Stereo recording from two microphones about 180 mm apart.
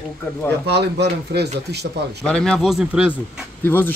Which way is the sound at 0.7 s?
70° right (ahead or behind).